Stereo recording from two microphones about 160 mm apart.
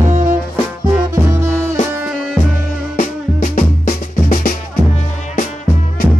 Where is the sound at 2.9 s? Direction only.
50° left (ahead or behind).